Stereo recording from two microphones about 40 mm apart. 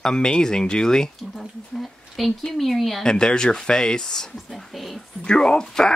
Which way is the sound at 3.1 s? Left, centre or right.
Centre.